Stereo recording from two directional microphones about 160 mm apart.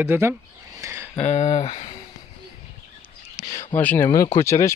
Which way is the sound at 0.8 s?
15° right (ahead or behind).